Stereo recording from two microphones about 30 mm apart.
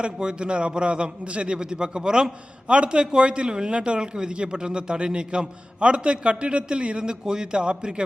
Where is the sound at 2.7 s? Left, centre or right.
Right.